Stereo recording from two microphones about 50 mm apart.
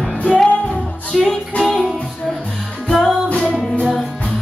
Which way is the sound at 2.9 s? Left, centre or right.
Centre.